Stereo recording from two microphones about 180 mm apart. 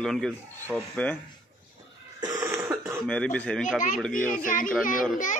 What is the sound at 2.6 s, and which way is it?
Throat clearing, 15° right (ahead or behind).